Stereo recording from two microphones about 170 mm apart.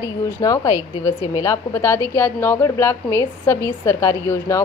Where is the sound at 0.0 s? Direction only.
20° left (ahead or behind).